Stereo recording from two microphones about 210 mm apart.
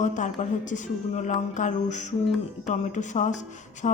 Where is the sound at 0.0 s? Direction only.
35° left (ahead or behind).